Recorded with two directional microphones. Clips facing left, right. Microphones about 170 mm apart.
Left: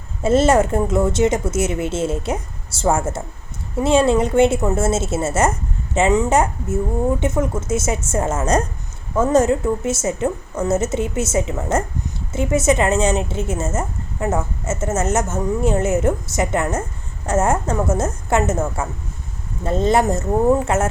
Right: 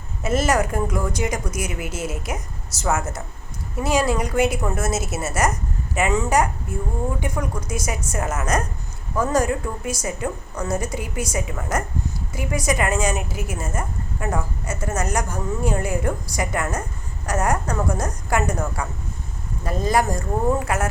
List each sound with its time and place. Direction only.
0.2 s a woman's voice: 30° left (ahead or behind)